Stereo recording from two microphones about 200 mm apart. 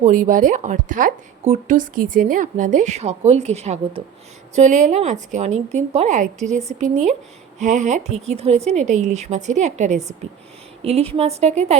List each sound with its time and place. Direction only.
0.0 s speech: 40° right (ahead or behind)